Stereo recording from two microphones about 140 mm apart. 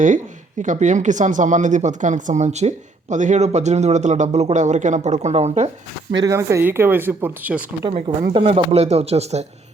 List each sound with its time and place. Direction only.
0.6 s speech: 60° right (ahead or behind)
6.2 s speech: 20° right (ahead or behind)
7.9 s speech: 35° right (ahead or behind)